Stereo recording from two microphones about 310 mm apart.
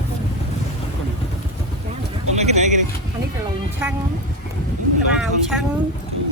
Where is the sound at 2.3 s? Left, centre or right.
Right.